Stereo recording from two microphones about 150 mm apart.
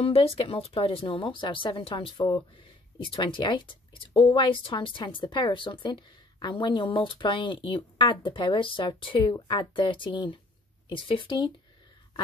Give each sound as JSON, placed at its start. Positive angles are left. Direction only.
{"t": 0.0, "sound": "speech", "side_deg": 40}